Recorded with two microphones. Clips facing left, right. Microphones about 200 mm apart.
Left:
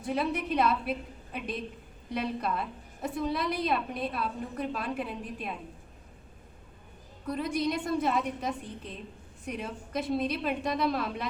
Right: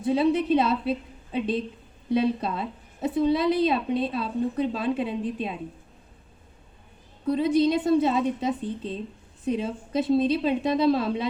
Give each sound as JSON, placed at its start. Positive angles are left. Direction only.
{"t": 0.1, "sound": "a woman's voice", "side_deg": -25}
{"t": 7.3, "sound": "a woman's voice", "side_deg": -25}